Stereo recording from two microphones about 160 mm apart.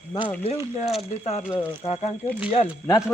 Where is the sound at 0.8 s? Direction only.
Centre (ahead or behind).